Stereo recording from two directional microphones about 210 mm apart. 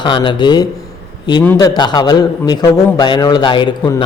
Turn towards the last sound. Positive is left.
turn(degrees=20)  # may be behind; listen again after turning